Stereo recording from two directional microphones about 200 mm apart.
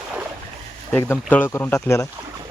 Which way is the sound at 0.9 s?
10° left (ahead or behind).